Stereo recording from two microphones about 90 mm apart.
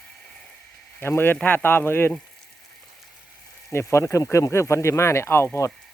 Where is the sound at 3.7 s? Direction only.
30° left (ahead or behind).